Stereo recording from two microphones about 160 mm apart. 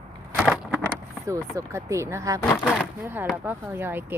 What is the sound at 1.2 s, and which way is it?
A woman's voice, 20° right (ahead or behind).